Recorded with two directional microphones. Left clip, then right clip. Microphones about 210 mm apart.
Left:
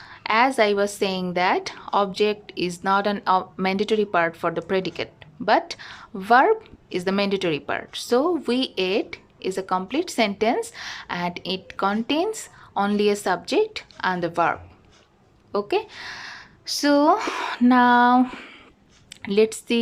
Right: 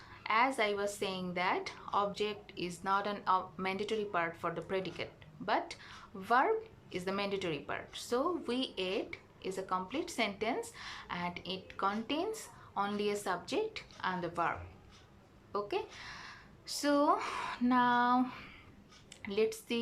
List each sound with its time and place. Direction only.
0.0 s speech: 50° left (ahead or behind)
15.5 s speech: 45° left (ahead or behind)